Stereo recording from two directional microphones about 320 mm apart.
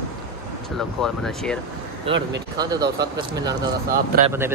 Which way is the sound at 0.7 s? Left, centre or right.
Centre.